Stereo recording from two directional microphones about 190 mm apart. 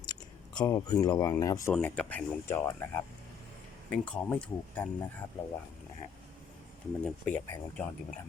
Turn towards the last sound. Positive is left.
turn(degrees=10)  # may be behind; listen again after turning